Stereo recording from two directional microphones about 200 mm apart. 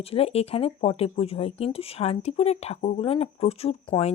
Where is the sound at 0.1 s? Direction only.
30° left (ahead or behind).